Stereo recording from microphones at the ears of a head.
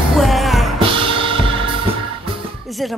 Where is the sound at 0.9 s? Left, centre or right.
Right.